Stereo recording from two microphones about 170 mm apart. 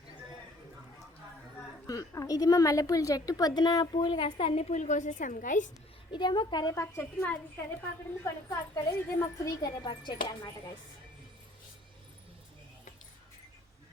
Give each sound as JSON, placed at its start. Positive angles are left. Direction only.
{"t": 1.9, "sound": "a woman's voice", "side_deg": 20}
{"t": 6.1, "sound": "a woman's voice", "side_deg": 25}